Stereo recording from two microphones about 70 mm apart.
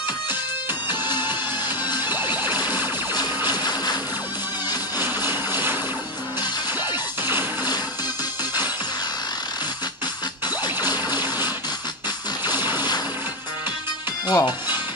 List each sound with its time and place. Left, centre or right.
2.0 s music: right
3.2 s a sound: left
4.9 s a sound: right
11.1 s music: right
12.5 s music: right
14.2 s speech: left